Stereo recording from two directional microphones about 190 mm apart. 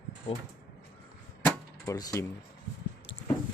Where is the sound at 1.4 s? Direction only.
15° left (ahead or behind).